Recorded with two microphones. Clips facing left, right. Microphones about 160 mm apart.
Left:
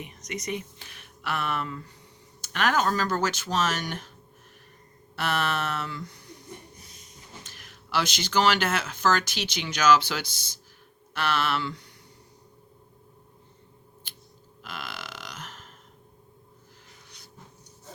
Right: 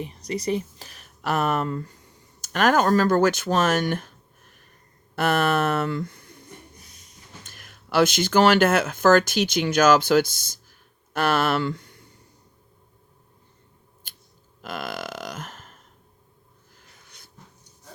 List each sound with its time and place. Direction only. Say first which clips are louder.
0.0 s speech: right 7 dB; 35° right (ahead or behind); by 4.1 s 55° right (ahead or behind)
5.1 s speech: right 7 dB; 50° right (ahead or behind)
7.4 s speech: right 1 dB; 50° right (ahead or behind)
14.0 s a sound: left 1 dB; 50° right (ahead or behind)
14.6 s burping: right 8 dB; 45° right (ahead or behind)